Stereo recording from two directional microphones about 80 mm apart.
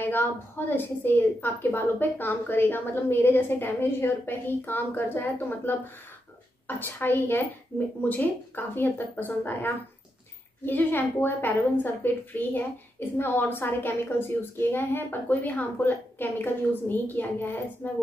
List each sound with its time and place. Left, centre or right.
0.0 s a woman's voice: left
6.8 s a woman's voice: left